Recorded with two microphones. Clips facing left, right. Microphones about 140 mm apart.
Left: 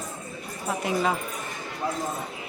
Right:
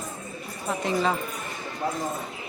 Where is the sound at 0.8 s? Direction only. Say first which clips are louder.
Right 1 dB; 10° left (ahead or behind).